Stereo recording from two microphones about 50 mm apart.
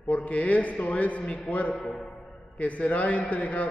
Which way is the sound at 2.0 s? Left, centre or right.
Centre.